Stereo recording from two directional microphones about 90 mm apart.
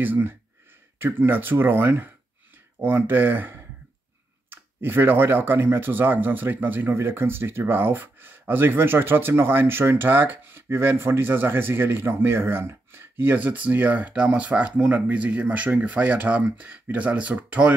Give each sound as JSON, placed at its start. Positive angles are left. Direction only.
{"t": 0.0, "sound": "speech", "side_deg": -20}